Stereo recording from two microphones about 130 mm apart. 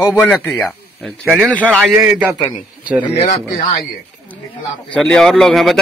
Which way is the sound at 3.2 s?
60° left (ahead or behind).